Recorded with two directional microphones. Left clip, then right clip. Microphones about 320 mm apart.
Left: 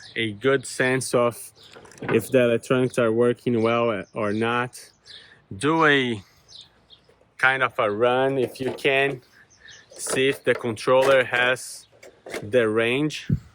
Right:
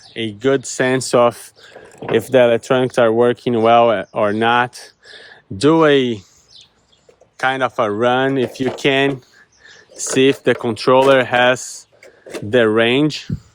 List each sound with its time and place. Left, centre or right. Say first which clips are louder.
0.1 s speech: right 5 dB; centre
7.3 s speech: right 3 dB; centre